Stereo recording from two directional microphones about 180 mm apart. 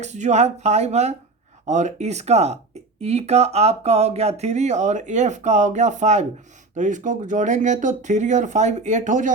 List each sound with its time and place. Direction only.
0.0 s speech: 40° right (ahead or behind)